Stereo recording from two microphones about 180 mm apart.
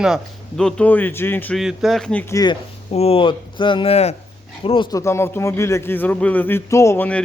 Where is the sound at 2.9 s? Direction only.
35° left (ahead or behind).